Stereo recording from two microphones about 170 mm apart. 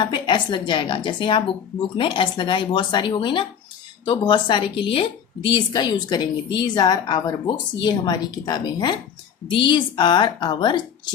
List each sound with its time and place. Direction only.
0.0 s a woman's voice: 25° left (ahead or behind)